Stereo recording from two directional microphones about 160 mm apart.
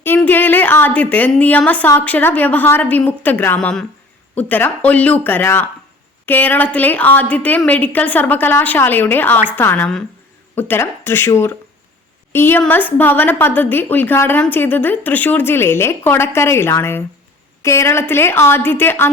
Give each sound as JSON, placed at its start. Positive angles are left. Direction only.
{"t": 0.0, "sound": "a woman's voice", "side_deg": 10}